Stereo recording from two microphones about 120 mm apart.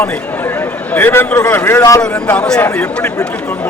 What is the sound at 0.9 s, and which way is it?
A man's voice, 15° left (ahead or behind).